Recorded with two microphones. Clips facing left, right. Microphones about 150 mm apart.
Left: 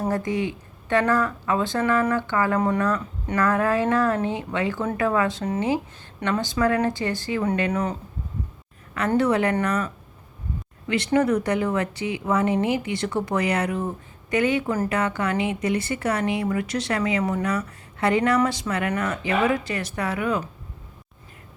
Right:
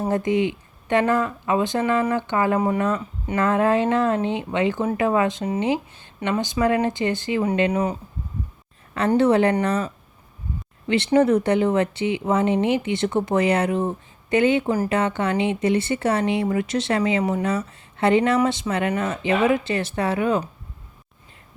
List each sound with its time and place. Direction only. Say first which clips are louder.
0.3 s speech: right 5 dB; 20° right (ahead or behind)
9.0 s speech: right 3 dB; 30° right (ahead or behind)